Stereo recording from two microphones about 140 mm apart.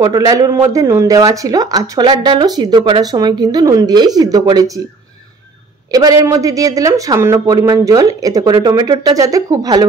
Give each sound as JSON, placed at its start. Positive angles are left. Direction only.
{"t": 0.0, "sound": "speech", "side_deg": -25}
{"t": 5.9, "sound": "a man's voice", "side_deg": -25}